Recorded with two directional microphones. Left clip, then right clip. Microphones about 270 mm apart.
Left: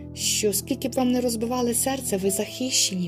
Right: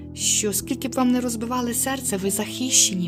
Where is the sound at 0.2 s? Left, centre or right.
Centre.